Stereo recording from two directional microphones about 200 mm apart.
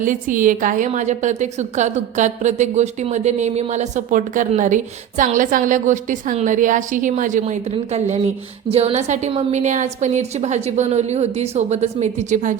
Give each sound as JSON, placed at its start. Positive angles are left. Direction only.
{"t": 0.0, "sound": "a woman's voice", "side_deg": -40}